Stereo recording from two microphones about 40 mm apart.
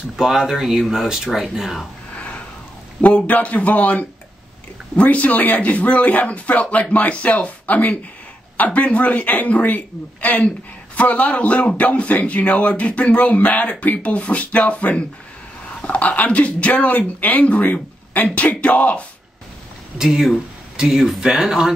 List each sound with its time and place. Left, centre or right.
0.1 s speech: centre
2.1 s a sound: left
3.3 s speech: left
20.0 s speech: centre